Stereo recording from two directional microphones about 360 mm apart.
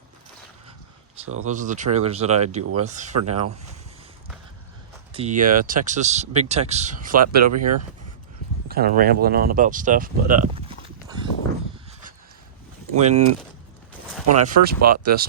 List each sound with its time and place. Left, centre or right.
1.5 s speech: centre
3.2 s speech: right
5.1 s speech: centre
7.4 s speech: right
8.6 s speech: right
10.5 s clip-clop: centre
13.0 s speech: centre
14.3 s speech: right